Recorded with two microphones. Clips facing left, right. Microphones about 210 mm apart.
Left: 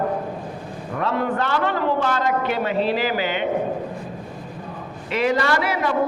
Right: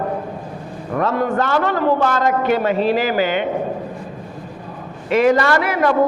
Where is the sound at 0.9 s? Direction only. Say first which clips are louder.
Right 4 dB; 45° right (ahead or behind).